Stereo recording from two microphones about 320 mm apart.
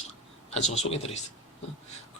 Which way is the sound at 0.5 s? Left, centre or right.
Left.